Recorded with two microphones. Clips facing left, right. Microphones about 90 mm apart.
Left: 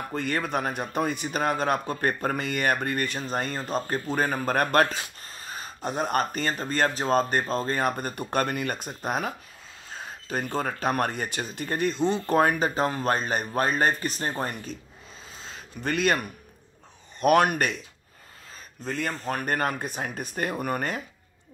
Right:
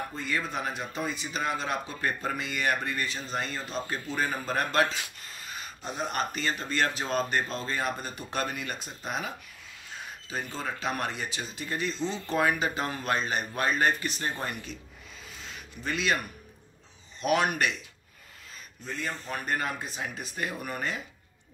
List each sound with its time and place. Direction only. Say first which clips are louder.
0.1 s speech: left 5 dB; 60° left (ahead or behind)
4.9 s speech: left 2 dB; 35° left (ahead or behind)
9.8 s a sound: left 3 dB; 35° left (ahead or behind)
10.2 s speech: left 6 dB; 55° left (ahead or behind); by 14.8 s 40° left (ahead or behind)
15.3 s a sound: left 2 dB; 30° left (ahead or behind)
15.8 s speech: left 4 dB; 50° left (ahead or behind)
17.2 s speech: left 5 dB; 50° left (ahead or behind)
18.9 s speech: left 5 dB; 55° left (ahead or behind)